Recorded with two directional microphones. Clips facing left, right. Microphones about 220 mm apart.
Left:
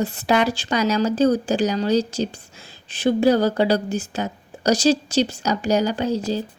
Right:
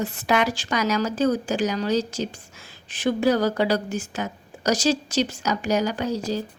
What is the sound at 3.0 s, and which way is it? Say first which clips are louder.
A woman's voice: left 4 dB; 30° left (ahead or behind).